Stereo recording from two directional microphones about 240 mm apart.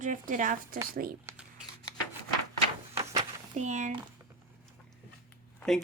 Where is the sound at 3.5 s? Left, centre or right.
Right.